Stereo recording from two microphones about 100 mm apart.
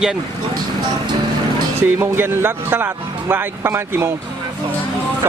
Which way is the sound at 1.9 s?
25° right (ahead or behind).